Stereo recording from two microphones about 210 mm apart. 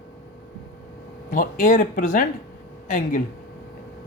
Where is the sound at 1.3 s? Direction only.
40° left (ahead or behind).